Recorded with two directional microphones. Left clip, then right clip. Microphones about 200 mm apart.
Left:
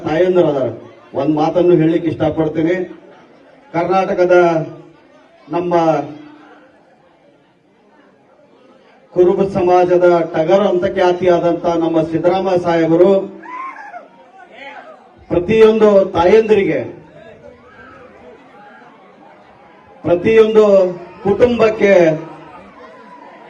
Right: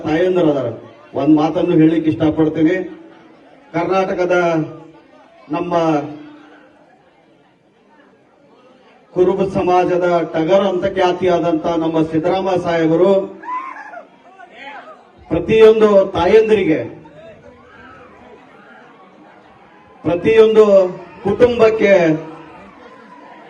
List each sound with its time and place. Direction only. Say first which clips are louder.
0.0 s a man's voice: left 2 dB; 50° left (ahead or behind)
9.1 s a man's voice: left 2 dB; 50° left (ahead or behind)
13.4 s a sound: right 2 dB; 30° right (ahead or behind)
15.3 s a man's voice: right 1 dB; 50° left (ahead or behind)
20.0 s a man's voice: even; 50° left (ahead or behind)